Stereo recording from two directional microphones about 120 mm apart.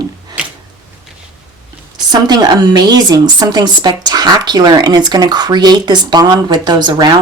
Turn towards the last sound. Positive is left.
turn(degrees=-35)  # may be behind; listen again after turning